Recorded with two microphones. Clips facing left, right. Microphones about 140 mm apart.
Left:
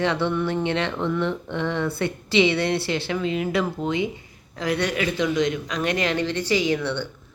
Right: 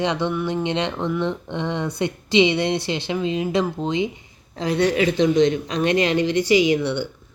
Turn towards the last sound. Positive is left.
turn(degrees=-15)  # may be behind; listen again after turning